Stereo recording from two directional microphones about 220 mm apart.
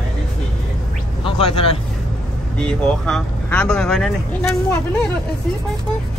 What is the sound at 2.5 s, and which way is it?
Speech, 5° left (ahead or behind).